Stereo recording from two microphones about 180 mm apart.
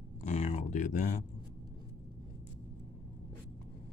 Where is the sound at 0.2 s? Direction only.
40° left (ahead or behind).